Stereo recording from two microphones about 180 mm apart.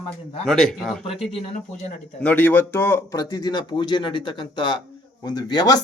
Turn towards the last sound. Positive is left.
turn(degrees=25)  # may be behind; listen again after turning